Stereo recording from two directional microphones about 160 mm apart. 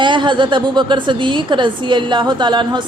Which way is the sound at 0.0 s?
30° right (ahead or behind).